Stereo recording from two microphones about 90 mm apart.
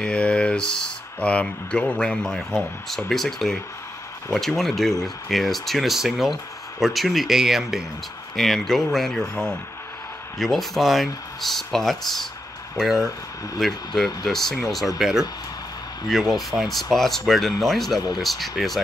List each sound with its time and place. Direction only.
0.0 s a man's voice: 10° left (ahead or behind)
10.4 s speech: centre (ahead or behind)